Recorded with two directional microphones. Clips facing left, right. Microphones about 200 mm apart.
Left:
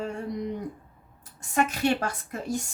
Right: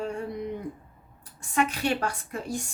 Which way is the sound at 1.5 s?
45° left (ahead or behind).